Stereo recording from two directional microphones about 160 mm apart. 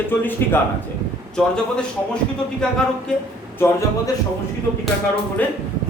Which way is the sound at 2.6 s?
5° left (ahead or behind).